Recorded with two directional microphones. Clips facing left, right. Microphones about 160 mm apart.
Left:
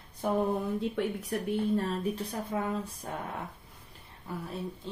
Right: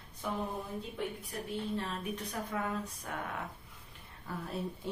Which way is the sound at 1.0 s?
80° left.